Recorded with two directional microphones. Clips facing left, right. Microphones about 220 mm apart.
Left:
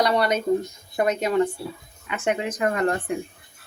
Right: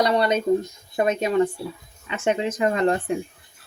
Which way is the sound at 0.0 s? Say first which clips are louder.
Right 1 dB; 25° right (ahead or behind).